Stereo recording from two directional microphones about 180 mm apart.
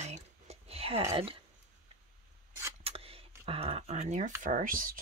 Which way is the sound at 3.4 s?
35° right (ahead or behind).